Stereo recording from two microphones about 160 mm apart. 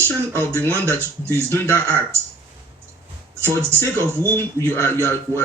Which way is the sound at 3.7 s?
15° left (ahead or behind).